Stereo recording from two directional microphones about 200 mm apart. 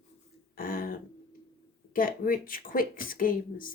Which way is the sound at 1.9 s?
45° left (ahead or behind).